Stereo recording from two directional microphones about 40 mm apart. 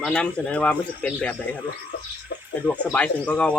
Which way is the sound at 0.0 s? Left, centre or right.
Centre.